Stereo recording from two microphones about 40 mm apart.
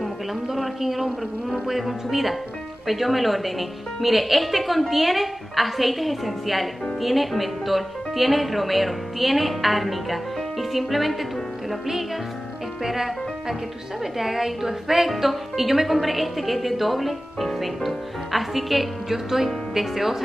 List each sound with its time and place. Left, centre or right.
0.0 s speech: centre
12.8 s speech: centre